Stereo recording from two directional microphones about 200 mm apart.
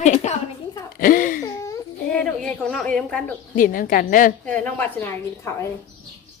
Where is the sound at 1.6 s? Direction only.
15° left (ahead or behind).